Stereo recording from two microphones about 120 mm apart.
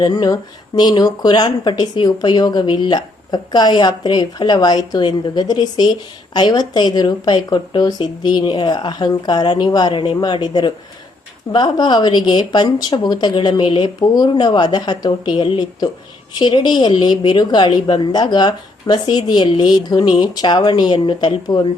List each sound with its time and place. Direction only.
0.0 s speech: 35° left (ahead or behind)